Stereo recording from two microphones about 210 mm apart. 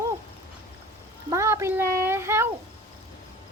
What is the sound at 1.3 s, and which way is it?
Speech, 15° right (ahead or behind).